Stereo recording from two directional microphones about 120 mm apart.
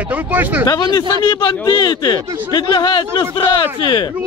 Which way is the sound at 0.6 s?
35° left (ahead or behind).